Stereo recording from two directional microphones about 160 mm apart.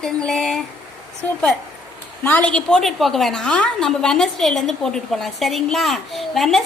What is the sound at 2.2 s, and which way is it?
A woman's voice, 10° left (ahead or behind).